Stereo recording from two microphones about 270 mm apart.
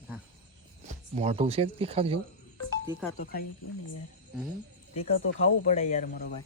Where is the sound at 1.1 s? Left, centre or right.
Right.